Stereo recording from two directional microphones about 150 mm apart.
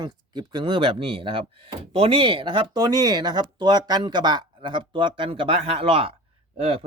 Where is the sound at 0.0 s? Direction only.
30° right (ahead or behind).